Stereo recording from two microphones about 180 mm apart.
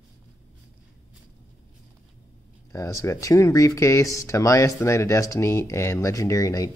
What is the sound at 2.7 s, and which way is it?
Speech, 15° left (ahead or behind).